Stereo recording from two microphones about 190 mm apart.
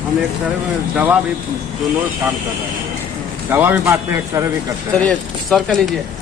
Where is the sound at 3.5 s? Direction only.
10° right (ahead or behind).